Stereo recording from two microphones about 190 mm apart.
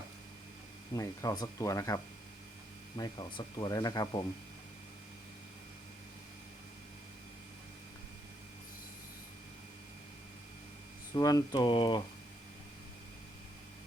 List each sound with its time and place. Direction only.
0.9 s speech: 20° left (ahead or behind)
3.0 s speech: 25° left (ahead or behind)
11.1 s speech: 20° left (ahead or behind)